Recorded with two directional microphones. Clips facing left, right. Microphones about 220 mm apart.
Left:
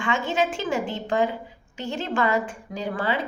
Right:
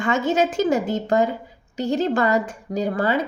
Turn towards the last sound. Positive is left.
turn(degrees=-40)  # may be behind; listen again after turning